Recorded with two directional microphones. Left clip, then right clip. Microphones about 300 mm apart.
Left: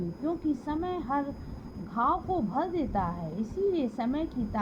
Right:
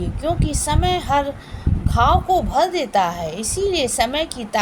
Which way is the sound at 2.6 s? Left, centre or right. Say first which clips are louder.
Right 13 dB; centre.